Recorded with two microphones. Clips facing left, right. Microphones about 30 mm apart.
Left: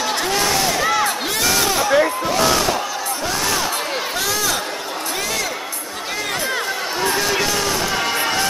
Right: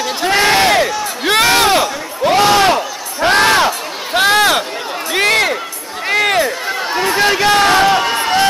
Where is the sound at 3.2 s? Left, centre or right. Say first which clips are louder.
Right 12 dB; right.